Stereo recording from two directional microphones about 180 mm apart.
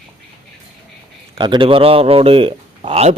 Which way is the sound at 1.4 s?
25° right (ahead or behind).